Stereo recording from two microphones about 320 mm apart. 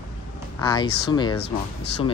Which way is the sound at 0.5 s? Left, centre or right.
Centre.